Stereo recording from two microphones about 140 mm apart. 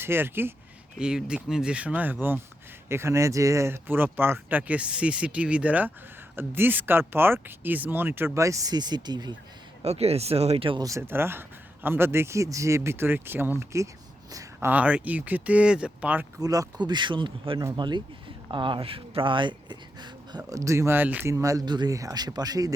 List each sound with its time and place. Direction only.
0.0 s speech: 15° right (ahead or behind)
9.8 s speech: 50° right (ahead or behind)
10.8 s speech: 20° right (ahead or behind)
16.4 s speech: 25° right (ahead or behind)